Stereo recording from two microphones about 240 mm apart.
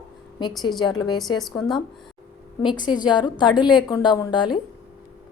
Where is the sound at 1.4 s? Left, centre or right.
Centre.